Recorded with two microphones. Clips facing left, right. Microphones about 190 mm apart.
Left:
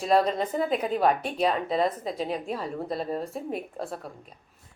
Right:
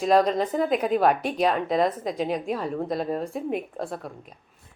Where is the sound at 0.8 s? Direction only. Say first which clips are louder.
Right 3 dB; 45° right (ahead or behind).